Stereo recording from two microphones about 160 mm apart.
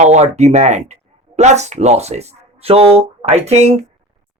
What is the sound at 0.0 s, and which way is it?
Speech, 45° right (ahead or behind).